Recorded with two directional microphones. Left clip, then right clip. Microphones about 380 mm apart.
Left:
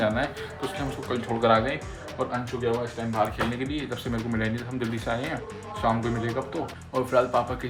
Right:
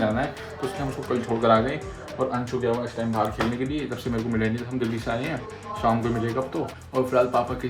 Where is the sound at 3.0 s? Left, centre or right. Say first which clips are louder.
Right 1 dB; centre.